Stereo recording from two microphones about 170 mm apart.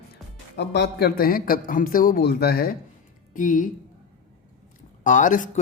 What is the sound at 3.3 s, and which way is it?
Speech, 50° left (ahead or behind).